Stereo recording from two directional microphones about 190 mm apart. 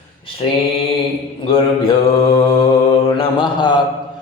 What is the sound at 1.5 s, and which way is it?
Mantra, 30° left (ahead or behind).